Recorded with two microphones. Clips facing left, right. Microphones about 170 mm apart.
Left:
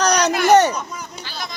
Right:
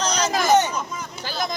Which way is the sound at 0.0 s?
70° left (ahead or behind).